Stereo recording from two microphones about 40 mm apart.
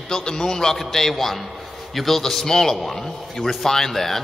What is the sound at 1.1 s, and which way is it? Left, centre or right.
A man's voice, centre.